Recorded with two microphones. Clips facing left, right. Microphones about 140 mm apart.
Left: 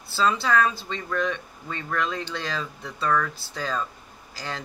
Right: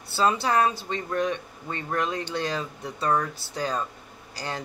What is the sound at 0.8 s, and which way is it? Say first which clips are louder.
Speech: right 1 dB; 45° right (ahead or behind).